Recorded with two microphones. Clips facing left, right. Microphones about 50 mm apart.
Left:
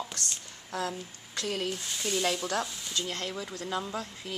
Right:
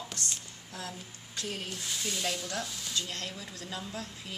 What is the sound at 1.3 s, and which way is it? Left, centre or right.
Speech, left.